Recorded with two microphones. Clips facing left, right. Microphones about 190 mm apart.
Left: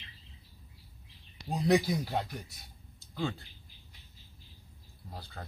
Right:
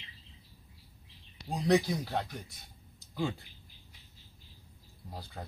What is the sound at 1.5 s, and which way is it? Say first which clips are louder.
Speech: even; 5° left (ahead or behind).